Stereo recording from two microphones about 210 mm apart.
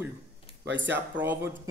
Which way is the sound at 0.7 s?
60° right (ahead or behind).